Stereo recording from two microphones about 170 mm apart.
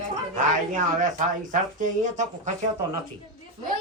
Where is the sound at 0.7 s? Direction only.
45° right (ahead or behind).